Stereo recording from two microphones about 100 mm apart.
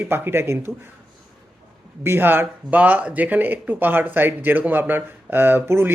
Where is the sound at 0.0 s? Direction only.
20° right (ahead or behind).